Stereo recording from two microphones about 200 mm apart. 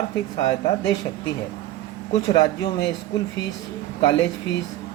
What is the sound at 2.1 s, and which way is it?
Speech, 25° left (ahead or behind).